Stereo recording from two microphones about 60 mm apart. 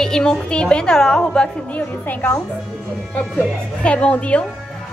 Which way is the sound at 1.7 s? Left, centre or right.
Left.